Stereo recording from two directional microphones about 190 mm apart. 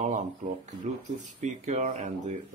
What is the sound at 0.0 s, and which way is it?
Speech, 40° right (ahead or behind).